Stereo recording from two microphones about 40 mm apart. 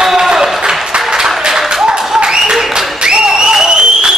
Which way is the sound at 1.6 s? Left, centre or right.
Centre.